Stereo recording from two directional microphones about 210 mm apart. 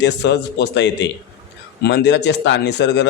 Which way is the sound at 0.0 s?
55° left (ahead or behind).